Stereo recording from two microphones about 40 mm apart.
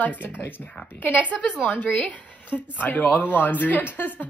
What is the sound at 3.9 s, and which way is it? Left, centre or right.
Speech, left.